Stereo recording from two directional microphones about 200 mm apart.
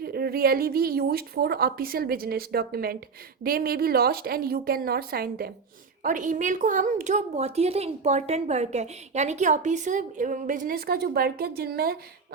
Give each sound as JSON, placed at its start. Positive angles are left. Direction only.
{"t": 0.0, "sound": "a woman's voice", "side_deg": -50}